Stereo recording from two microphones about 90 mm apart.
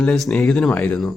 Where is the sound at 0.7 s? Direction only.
20° left (ahead or behind).